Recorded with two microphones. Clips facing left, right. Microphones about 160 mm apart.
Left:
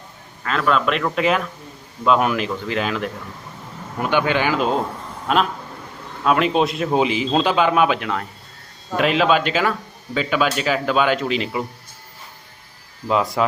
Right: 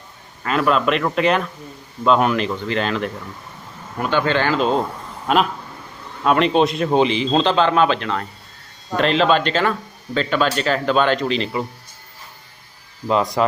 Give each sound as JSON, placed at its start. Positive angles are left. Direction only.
{"t": 0.4, "sound": "a man's voice", "side_deg": -5}
{"t": 5.3, "sound": "a man's voice", "side_deg": 0}
{"t": 13.1, "sound": "a man's voice", "side_deg": 5}